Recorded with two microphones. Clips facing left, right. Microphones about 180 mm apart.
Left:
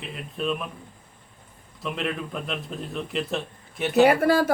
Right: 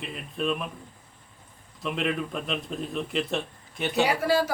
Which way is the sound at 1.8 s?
Centre (ahead or behind).